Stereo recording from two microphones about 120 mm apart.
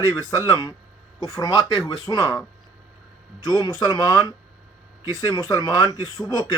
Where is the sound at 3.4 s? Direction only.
35° left (ahead or behind).